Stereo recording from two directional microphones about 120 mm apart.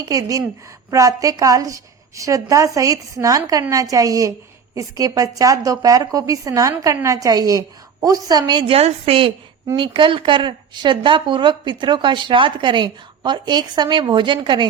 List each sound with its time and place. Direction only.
0.0 s a woman's voice: 30° right (ahead or behind)
8.7 s a woman's voice: 55° right (ahead or behind)